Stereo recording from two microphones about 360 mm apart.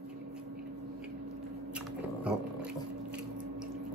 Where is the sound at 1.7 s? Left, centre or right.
Centre.